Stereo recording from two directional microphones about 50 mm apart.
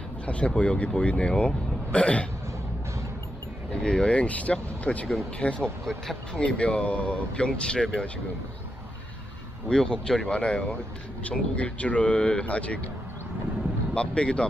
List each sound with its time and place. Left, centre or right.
0.2 s speech: left
3.8 s speech: centre
5.9 s speech: centre
6.4 s speech: left
9.7 s speech: centre
13.9 s speech: left